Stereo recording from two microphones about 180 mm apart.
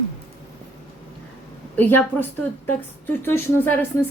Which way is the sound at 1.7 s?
10° left (ahead or behind).